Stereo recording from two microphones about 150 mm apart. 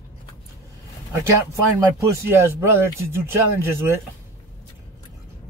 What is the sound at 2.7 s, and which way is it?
Speech, 15° right (ahead or behind).